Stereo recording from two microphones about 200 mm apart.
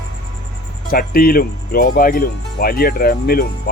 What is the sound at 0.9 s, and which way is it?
Speech, 50° left (ahead or behind).